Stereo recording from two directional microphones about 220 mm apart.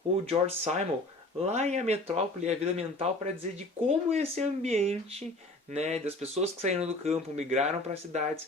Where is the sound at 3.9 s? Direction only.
30° right (ahead or behind).